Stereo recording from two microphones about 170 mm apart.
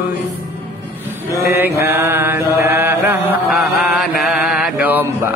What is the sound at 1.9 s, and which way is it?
Mantra, 15° right (ahead or behind).